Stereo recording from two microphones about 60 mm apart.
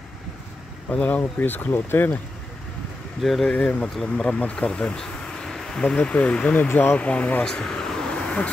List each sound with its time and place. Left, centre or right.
0.9 s speech: left
3.2 s speech: centre
3.5 s speech: left
3.8 s speech: centre
4.6 s bee: centre
5.9 s speech: left
6.7 s speech: left
7.0 s speech: left
7.4 s a sound: centre